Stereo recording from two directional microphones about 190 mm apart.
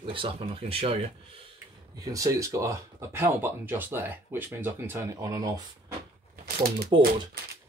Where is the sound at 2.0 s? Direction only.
15° right (ahead or behind).